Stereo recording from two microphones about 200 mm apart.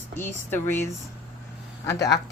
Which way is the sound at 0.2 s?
10° left (ahead or behind).